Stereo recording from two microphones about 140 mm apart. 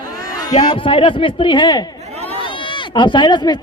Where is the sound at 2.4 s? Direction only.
35° left (ahead or behind).